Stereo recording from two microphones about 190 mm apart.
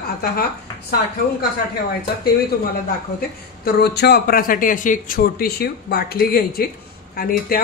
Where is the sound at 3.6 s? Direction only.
55° left (ahead or behind).